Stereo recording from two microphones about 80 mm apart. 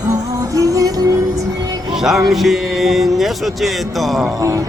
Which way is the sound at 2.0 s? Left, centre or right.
Centre.